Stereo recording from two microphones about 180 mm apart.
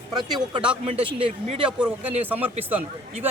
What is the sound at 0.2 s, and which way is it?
Speech, 25° right (ahead or behind).